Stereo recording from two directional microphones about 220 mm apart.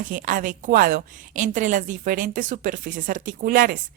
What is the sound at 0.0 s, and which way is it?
A woman's voice, 35° right (ahead or behind).